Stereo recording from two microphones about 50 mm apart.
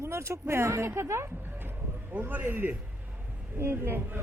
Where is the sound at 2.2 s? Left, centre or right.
Right.